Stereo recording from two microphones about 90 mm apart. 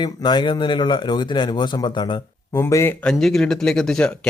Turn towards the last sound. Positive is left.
turn(degrees=5)  # may be behind; listen again after turning